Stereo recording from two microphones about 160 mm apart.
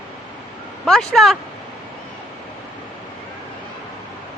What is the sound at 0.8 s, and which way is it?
Speech, centre (ahead or behind).